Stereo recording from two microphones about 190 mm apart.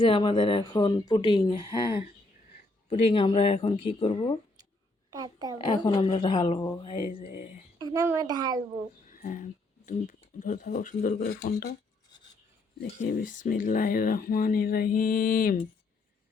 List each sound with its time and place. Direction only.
0.0 s speech: 25° left (ahead or behind)
5.1 s a child's voice: 20° right (ahead or behind)
5.8 s speech: 25° left (ahead or behind)
7.8 s a child's voice: 15° right (ahead or behind)
9.0 s speech: 45° left (ahead or behind)
13.1 s speech: 50° left (ahead or behind)